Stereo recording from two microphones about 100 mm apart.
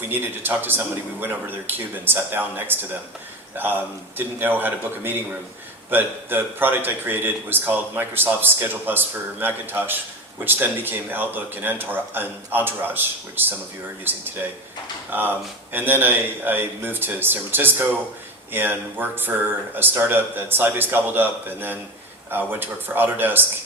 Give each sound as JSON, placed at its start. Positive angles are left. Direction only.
{"t": 0.1, "sound": "a man's voice", "side_deg": -20}